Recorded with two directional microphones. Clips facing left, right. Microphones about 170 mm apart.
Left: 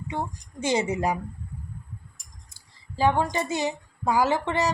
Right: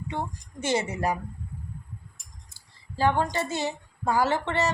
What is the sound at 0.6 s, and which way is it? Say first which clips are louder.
Speech: left 2 dB; 15° left (ahead or behind).